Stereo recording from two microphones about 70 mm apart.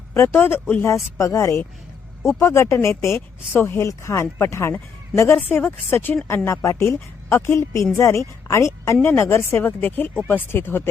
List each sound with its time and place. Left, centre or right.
0.1 s speech: left
9.6 s speech: left